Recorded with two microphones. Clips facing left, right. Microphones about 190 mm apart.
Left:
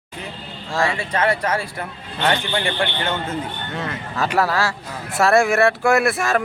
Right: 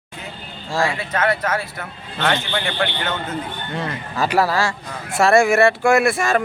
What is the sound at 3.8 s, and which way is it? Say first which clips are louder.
Speech: right 2 dB; centre (ahead or behind).